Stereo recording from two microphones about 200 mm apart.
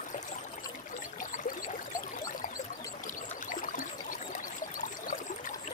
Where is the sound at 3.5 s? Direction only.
40° left (ahead or behind).